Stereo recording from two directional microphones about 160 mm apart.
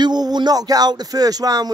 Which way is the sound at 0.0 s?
25° right (ahead or behind).